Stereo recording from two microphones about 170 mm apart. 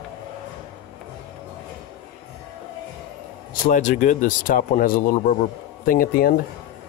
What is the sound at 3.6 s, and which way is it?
Speech, 45° left (ahead or behind).